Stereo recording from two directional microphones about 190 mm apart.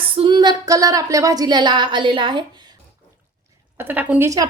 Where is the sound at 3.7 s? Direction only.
10° right (ahead or behind).